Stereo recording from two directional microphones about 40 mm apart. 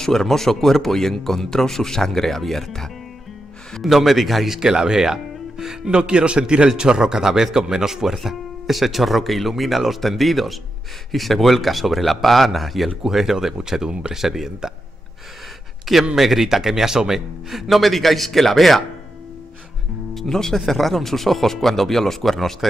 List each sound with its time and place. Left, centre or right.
0.0 s speech: centre
3.8 s speech: centre
4.6 s speech: centre
5.9 s speech: right; by 12.9 s centre
13.0 s speech: centre
15.8 s a man's voice: centre
20.2 s speech: centre